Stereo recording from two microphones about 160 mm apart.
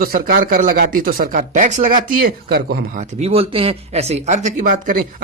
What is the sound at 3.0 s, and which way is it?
Speech, 40° right (ahead or behind).